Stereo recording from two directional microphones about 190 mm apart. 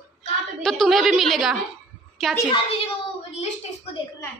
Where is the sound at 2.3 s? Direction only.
30° left (ahead or behind).